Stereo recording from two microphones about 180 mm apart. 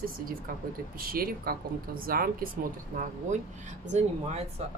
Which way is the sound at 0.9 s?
55° right (ahead or behind).